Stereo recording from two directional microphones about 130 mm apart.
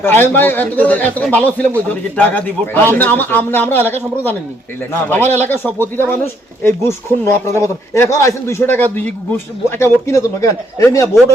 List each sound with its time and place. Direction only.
0.0 s a man's voice: 15° left (ahead or behind)